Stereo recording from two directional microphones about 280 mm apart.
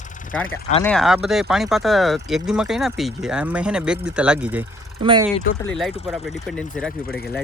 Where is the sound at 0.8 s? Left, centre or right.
Centre.